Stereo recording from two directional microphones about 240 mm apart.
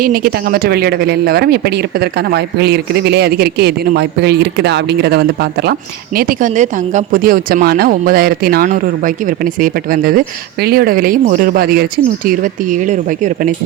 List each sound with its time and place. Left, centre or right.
0.0 s speech: right